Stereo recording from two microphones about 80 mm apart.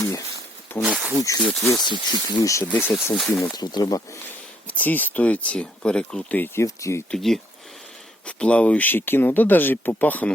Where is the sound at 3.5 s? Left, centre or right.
Left.